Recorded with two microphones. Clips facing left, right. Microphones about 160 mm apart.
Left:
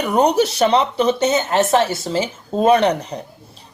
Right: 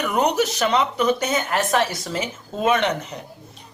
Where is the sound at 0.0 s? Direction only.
30° left (ahead or behind).